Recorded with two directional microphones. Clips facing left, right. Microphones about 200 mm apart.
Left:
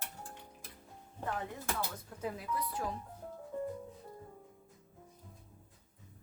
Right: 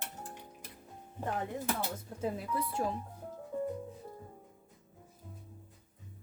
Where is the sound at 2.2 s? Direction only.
25° right (ahead or behind).